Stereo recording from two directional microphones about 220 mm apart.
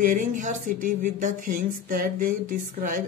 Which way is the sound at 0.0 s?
35° right (ahead or behind).